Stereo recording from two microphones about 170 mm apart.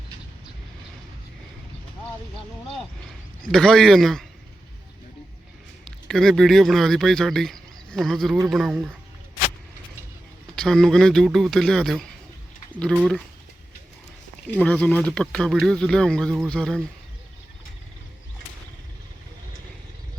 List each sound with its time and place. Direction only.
3.5 s speech: centre (ahead or behind)
6.1 s speech: centre (ahead or behind)
10.5 s speech: 5° left (ahead or behind)
14.5 s speech: 10° left (ahead or behind)